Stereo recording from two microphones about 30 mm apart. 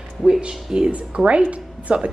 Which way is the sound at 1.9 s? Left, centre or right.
Right.